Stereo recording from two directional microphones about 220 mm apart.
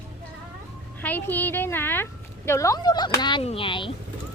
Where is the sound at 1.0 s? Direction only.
10° left (ahead or behind).